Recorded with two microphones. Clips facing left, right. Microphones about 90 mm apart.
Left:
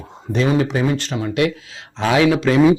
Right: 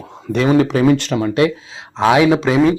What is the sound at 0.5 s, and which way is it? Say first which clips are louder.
Speech: right 6 dB; 65° right (ahead or behind).